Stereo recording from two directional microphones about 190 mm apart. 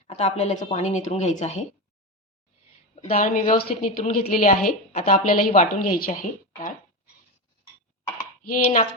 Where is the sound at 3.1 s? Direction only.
40° left (ahead or behind).